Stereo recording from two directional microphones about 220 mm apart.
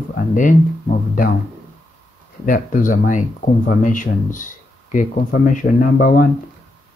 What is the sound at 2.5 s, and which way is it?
Speech, 35° left (ahead or behind).